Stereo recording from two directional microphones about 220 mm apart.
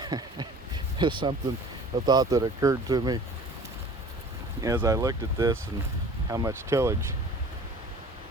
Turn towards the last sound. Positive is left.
turn(degrees=-10)  # may be behind; listen again after turning